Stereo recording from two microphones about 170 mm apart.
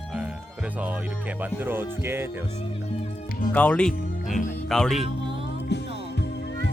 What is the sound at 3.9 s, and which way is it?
Music, 55° left (ahead or behind).